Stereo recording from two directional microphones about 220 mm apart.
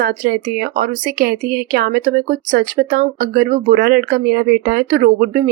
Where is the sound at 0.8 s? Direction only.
45° right (ahead or behind).